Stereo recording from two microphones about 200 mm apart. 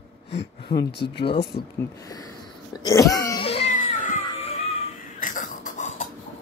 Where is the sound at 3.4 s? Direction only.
30° left (ahead or behind).